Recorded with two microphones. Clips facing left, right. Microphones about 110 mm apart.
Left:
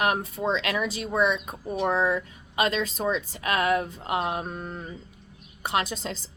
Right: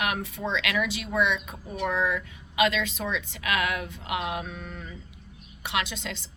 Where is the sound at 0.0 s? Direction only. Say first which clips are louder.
Left 4 dB; 40° left (ahead or behind).